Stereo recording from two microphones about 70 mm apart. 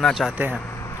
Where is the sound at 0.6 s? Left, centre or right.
Left.